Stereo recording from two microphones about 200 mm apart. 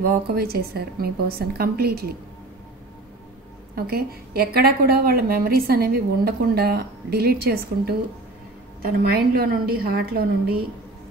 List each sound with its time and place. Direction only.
0.0 s a woman's voice: 50° right (ahead or behind)
3.7 s a woman's voice: 50° right (ahead or behind)